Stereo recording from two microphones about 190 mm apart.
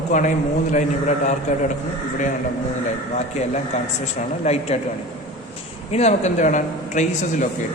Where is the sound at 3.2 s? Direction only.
35° left (ahead or behind).